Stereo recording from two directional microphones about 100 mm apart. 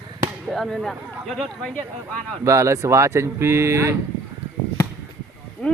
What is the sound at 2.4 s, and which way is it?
Speech, 30° right (ahead or behind).